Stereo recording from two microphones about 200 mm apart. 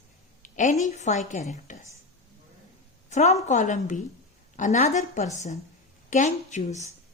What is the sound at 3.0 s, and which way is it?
A woman's voice, 35° left (ahead or behind).